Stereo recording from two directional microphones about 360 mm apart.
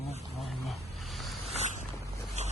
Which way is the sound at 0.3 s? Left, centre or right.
Centre.